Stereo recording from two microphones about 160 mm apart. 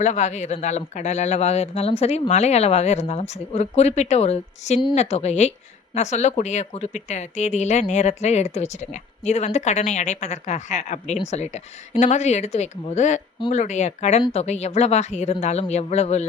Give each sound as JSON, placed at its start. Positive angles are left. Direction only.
{"t": 0.0, "sound": "speech", "side_deg": 45}